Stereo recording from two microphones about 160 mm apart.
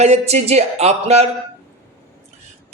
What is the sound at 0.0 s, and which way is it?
Speech, 45° right (ahead or behind).